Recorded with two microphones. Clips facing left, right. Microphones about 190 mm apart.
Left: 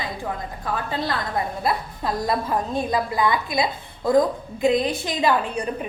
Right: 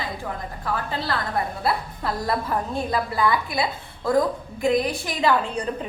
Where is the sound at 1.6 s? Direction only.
15° left (ahead or behind).